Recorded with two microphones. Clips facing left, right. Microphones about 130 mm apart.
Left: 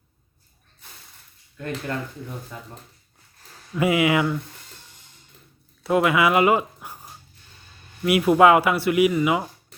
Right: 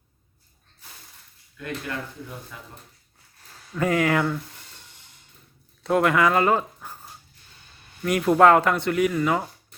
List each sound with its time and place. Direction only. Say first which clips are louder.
3.8 s speech: left 2 dB; 10° left (ahead or behind)
5.8 s speech: left 1 dB; 5° left (ahead or behind)